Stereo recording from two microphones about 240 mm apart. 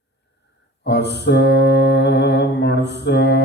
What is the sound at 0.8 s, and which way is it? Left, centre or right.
Mantra, left.